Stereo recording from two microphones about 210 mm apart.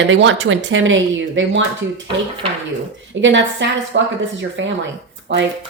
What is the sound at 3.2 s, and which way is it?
A woman's voice, 60° right (ahead or behind).